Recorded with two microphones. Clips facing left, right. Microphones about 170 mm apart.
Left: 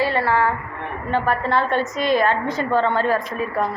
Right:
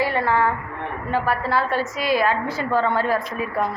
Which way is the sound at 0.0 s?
15° right (ahead or behind).